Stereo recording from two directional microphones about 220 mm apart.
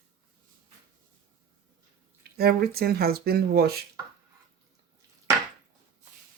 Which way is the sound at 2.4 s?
45° right (ahead or behind).